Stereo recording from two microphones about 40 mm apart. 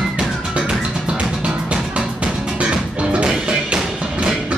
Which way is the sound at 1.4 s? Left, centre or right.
Right.